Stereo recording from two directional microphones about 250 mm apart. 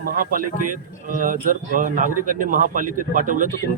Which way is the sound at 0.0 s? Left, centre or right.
Right.